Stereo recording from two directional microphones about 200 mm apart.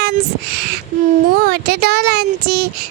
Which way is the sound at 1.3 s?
50° right (ahead or behind).